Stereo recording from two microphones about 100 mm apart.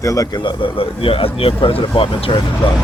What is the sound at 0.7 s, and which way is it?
Speech, 65° left (ahead or behind).